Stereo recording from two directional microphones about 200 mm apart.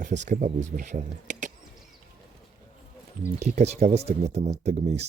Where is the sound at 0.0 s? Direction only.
35° right (ahead or behind).